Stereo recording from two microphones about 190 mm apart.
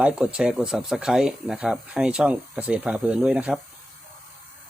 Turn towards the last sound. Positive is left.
turn(degrees=-5)  # may be behind; listen again after turning